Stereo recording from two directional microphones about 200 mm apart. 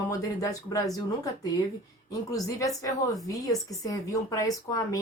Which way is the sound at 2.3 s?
15° left (ahead or behind).